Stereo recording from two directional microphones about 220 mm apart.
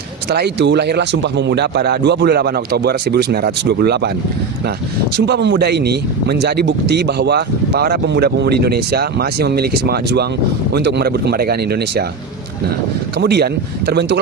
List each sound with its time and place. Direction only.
0.3 s speech: 50° right (ahead or behind)
5.1 s speech: 50° right (ahead or behind)
13.1 s speech: 45° right (ahead or behind)